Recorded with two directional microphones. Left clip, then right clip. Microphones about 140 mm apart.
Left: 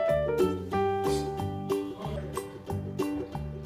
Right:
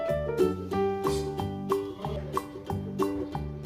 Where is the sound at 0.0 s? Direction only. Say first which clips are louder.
Left 1 dB; centre (ahead or behind).